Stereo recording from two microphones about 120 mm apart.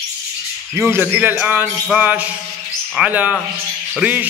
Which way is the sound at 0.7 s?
20° right (ahead or behind).